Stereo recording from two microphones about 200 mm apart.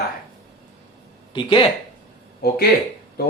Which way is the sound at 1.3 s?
25° left (ahead or behind).